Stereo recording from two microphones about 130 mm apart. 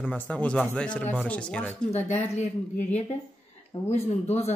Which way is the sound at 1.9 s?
60° left (ahead or behind).